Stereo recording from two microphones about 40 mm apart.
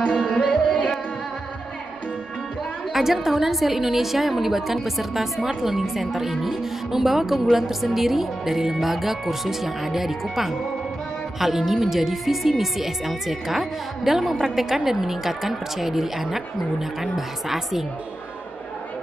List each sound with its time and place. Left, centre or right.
0.2 s music: centre
2.9 s a woman's voice: centre